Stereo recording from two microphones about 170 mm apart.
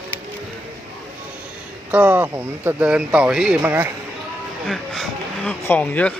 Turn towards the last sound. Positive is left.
turn(degrees=10)  # may be behind; listen again after turning